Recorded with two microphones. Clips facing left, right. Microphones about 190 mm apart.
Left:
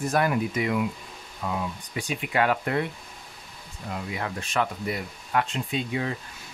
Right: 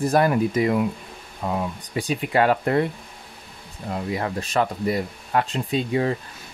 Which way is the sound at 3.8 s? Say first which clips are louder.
Right 6 dB; 35° right (ahead or behind).